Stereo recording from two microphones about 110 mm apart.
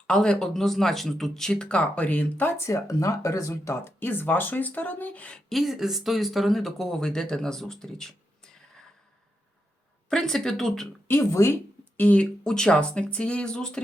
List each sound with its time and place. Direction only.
0.1 s speech: 5° left (ahead or behind)
5.5 s speech: centre (ahead or behind)
10.1 s speech: 5° left (ahead or behind)
11.1 s speech: 25° left (ahead or behind)
11.9 s speech: 15° left (ahead or behind)